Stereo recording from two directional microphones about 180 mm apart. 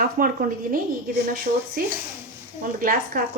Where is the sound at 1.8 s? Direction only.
50° right (ahead or behind).